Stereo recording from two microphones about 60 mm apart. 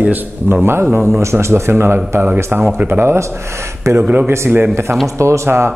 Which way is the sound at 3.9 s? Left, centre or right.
Right.